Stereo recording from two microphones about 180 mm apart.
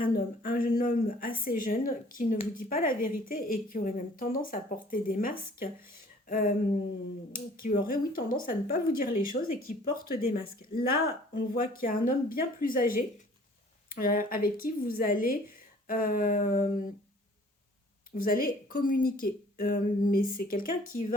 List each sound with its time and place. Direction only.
0.0 s a woman's voice: 50° left (ahead or behind)
6.2 s a sound: 50° left (ahead or behind)
7.3 s a woman's voice: 50° left (ahead or behind)
18.1 s a woman's voice: 50° left (ahead or behind)